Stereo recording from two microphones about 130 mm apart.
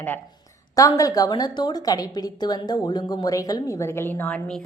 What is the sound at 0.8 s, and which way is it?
A woman's voice, 30° left (ahead or behind).